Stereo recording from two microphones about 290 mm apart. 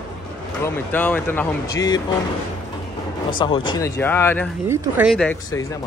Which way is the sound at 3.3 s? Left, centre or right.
Centre.